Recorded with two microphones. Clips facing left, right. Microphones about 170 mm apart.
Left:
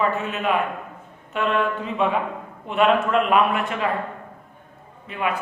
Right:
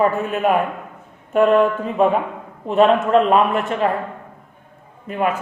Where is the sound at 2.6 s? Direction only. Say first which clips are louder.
Right 4 dB; 35° right (ahead or behind).